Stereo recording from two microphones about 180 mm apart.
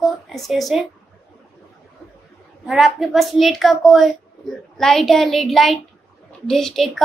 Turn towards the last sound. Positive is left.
turn(degrees=0)  # may be behind; listen again after turning